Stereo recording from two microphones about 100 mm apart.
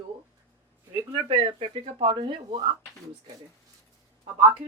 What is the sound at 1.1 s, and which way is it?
A woman's voice, 60° right (ahead or behind).